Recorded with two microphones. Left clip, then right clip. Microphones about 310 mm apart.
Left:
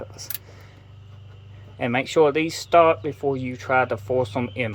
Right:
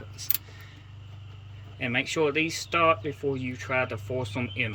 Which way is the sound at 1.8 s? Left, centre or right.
Centre.